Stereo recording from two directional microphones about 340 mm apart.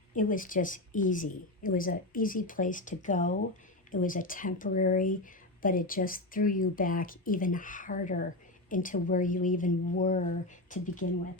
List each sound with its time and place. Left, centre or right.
0.1 s speech: left